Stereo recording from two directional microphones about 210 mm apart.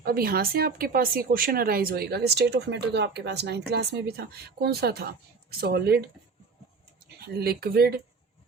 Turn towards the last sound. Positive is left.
turn(degrees=-50)  # may be behind; listen again after turning